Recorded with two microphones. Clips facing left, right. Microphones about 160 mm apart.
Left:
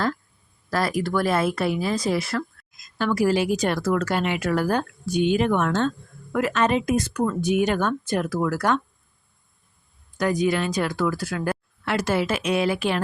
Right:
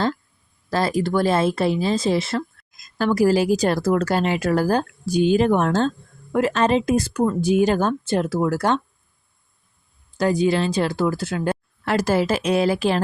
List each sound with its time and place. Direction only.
0.7 s speech: 25° right (ahead or behind)
3.0 s speech: 35° right (ahead or behind)
10.2 s speech: 30° right (ahead or behind)
11.9 s speech: 35° right (ahead or behind)